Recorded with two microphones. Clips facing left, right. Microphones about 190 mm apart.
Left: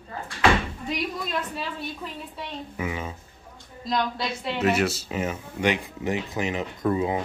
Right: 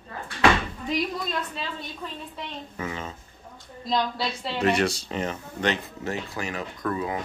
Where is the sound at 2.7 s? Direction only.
10° left (ahead or behind).